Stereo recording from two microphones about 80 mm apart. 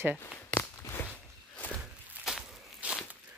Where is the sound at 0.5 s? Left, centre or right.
Left.